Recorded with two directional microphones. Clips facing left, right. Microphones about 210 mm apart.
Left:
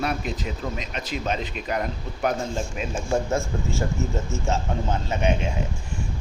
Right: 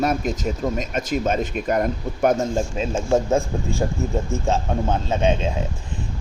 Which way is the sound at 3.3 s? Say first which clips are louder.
Right 4 dB; 15° right (ahead or behind).